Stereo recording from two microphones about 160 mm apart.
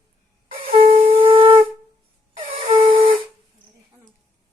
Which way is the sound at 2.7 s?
35° right (ahead or behind).